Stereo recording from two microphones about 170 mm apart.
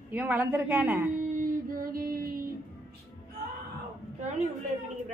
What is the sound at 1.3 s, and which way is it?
Child singing, 55° right (ahead or behind).